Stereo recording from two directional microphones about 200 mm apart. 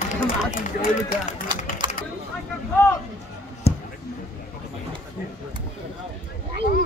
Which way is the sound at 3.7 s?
30° left (ahead or behind).